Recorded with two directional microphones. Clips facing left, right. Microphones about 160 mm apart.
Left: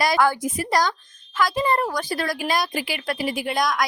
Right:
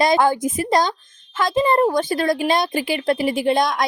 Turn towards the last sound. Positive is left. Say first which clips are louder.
# right 5 dB
turn(degrees=-25)  # may be behind; listen again after turning